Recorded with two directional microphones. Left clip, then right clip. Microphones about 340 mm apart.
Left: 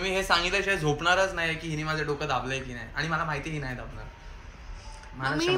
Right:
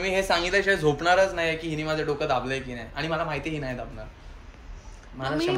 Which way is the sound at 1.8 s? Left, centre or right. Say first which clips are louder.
Right 3 dB; centre.